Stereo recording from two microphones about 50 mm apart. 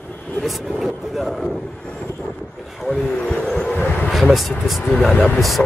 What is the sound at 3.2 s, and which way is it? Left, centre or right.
Vehicle, centre.